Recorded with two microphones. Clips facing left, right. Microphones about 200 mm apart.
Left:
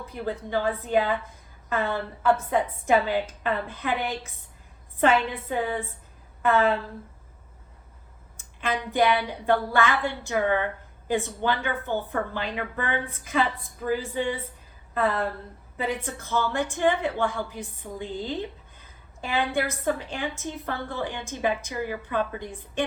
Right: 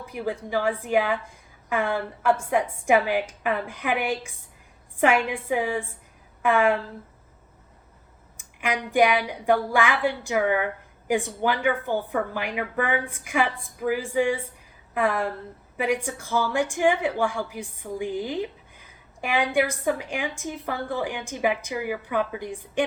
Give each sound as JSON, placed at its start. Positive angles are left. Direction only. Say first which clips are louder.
{"t": 0.0, "sound": "a woman's voice", "louder": "right 2 dB", "side_deg": -15}
{"t": 8.4, "sound": "a woman's voice", "louder": "right 1 dB", "side_deg": -15}